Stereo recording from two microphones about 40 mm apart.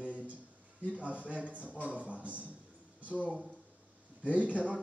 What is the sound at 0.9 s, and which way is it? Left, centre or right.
A man's voice, right.